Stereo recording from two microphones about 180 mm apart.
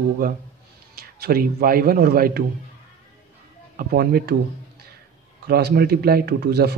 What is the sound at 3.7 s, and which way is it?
Speech, 55° right (ahead or behind).